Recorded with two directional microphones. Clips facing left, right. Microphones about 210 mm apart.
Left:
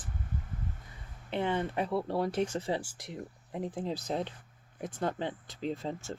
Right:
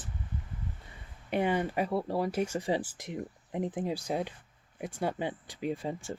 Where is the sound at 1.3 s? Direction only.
15° right (ahead or behind).